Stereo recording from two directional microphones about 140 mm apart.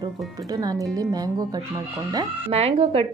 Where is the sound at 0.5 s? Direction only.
25° right (ahead or behind).